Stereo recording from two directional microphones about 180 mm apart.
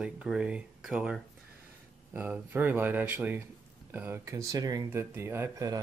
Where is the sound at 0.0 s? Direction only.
5° right (ahead or behind).